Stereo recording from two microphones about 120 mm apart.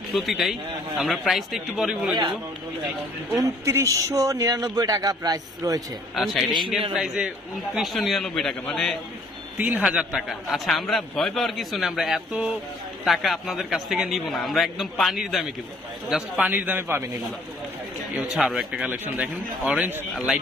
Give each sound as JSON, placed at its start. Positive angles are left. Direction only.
{"t": 0.1, "sound": "a man's voice", "side_deg": 0}
{"t": 3.3, "sound": "a man's voice", "side_deg": -25}
{"t": 6.1, "sound": "a man's voice", "side_deg": 0}
{"t": 9.6, "sound": "a man's voice", "side_deg": -10}
{"t": 16.4, "sound": "speech", "side_deg": -15}
{"t": 18.2, "sound": "speech", "side_deg": -5}